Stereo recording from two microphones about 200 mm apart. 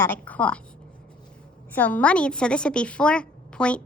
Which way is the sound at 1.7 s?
10° left (ahead or behind).